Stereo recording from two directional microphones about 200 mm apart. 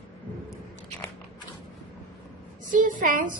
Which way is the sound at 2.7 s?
40° right (ahead or behind).